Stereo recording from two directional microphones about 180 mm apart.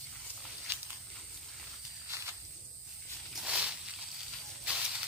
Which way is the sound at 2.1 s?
15° right (ahead or behind).